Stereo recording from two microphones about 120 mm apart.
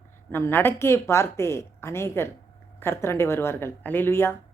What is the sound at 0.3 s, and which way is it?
Speech, 20° left (ahead or behind).